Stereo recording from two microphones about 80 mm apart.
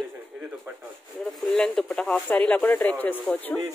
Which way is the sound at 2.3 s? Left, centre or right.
Centre.